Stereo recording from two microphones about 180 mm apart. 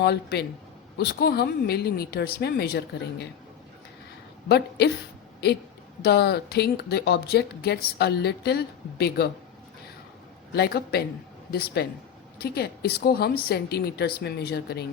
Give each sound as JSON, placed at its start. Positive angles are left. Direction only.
{"t": 0.0, "sound": "speech", "side_deg": 65}
{"t": 4.4, "sound": "speech", "side_deg": 65}
{"t": 6.0, "sound": "speech", "side_deg": 65}
{"t": 10.5, "sound": "speech", "side_deg": 65}